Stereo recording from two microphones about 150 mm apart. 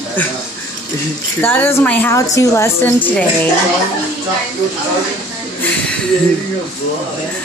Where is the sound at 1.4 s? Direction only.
15° left (ahead or behind).